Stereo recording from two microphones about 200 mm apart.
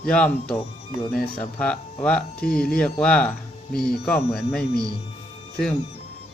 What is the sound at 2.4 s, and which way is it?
Speech, 50° left (ahead or behind).